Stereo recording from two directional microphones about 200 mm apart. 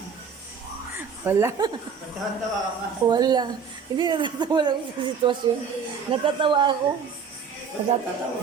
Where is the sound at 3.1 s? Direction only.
20° right (ahead or behind).